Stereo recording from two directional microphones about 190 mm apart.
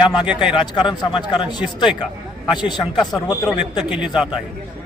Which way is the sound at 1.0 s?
25° left (ahead or behind).